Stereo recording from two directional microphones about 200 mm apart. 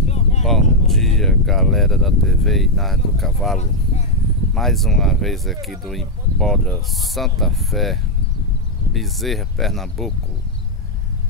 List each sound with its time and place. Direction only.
0.1 s a sound: 35° left (ahead or behind)
0.5 s speech: centre (ahead or behind)
4.6 s speech: centre (ahead or behind)